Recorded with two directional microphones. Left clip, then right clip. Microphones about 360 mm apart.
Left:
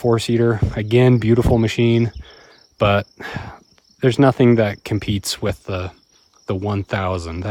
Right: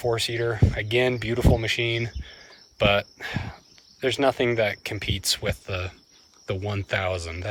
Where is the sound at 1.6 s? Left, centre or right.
Centre.